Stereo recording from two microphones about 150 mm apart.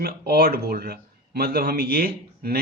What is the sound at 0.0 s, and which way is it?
Speech, 85° right.